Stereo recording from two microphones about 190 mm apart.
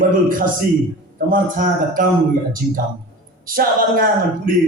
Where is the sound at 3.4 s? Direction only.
50° right (ahead or behind).